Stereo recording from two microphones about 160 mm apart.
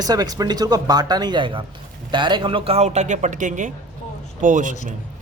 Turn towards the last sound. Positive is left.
turn(degrees=-55)  # may be behind; listen again after turning